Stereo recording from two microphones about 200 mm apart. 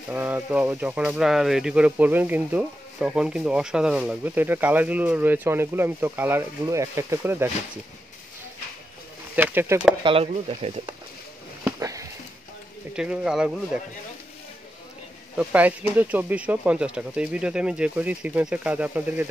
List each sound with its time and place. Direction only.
0.1 s speech: 10° right (ahead or behind)
9.3 s speech: 10° right (ahead or behind)
10.0 s speech: 30° right (ahead or behind)
11.6 s a sound: 15° right (ahead or behind)
12.9 s speech: 5° right (ahead or behind)
15.3 s speech: 5° right (ahead or behind)